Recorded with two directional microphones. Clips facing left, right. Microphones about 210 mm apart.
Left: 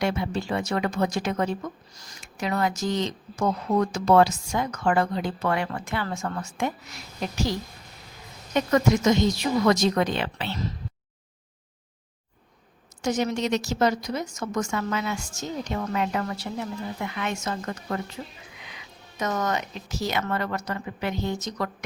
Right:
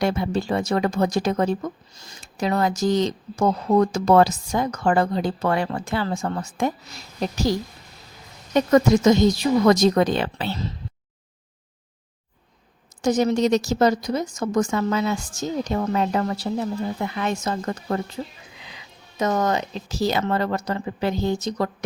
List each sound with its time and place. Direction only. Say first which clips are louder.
0.0 s a woman's voice: right 4 dB; 40° right (ahead or behind)
8.5 s a woman's voice: right 5 dB; 35° right (ahead or behind)
13.0 s a woman's voice: right 6 dB; 35° right (ahead or behind)